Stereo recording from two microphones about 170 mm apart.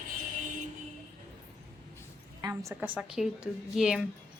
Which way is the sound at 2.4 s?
20° right (ahead or behind).